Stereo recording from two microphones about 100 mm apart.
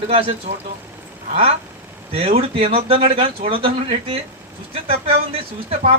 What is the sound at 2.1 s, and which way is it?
Speech, 75° right (ahead or behind).